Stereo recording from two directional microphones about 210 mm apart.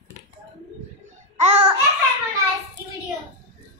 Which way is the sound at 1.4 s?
30° right (ahead or behind).